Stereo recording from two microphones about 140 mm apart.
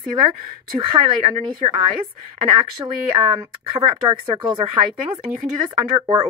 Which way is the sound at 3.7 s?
35° right (ahead or behind).